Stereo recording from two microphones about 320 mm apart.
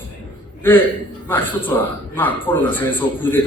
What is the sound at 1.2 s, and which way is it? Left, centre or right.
A man's voice, centre.